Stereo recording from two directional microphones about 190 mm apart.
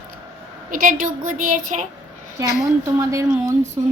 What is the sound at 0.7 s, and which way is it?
A woman's voice, 45° right (ahead or behind).